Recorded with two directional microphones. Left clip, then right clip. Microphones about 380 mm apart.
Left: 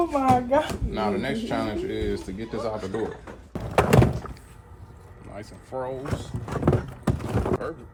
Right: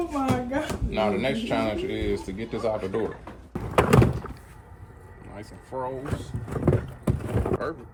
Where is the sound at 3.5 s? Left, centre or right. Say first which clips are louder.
Even; centre.